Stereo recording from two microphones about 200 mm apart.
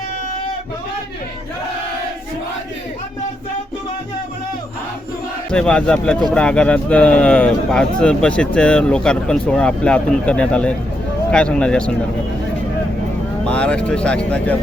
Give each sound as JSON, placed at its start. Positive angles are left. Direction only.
{"t": 5.5, "sound": "speech", "side_deg": 5}
{"t": 13.4, "sound": "speech", "side_deg": 5}